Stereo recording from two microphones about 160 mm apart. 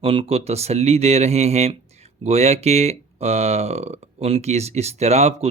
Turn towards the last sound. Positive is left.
turn(degrees=-40)  # may be behind; listen again after turning